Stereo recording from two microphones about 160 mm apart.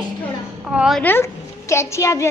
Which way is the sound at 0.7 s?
Centre (ahead or behind).